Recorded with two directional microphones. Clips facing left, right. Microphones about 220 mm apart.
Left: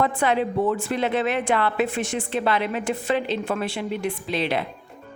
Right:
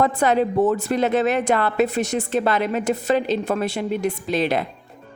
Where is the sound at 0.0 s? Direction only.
40° right (ahead or behind).